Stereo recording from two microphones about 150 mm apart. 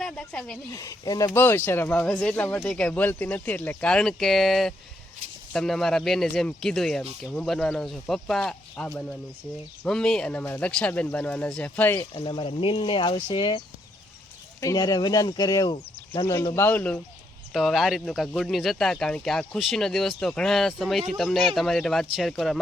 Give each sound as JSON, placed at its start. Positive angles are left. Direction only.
{"t": 0.0, "sound": "speech", "side_deg": 5}
{"t": 0.7, "sound": "speech", "side_deg": 20}
{"t": 12.1, "sound": "speech", "side_deg": 35}
{"t": 14.6, "sound": "speech", "side_deg": 25}
{"t": 16.6, "sound": "speech", "side_deg": 10}
{"t": 17.5, "sound": "speech", "side_deg": 0}